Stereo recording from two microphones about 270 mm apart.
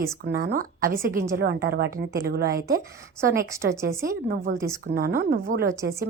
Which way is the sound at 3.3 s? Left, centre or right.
Centre.